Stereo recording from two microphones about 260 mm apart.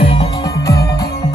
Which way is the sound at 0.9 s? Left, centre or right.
Left.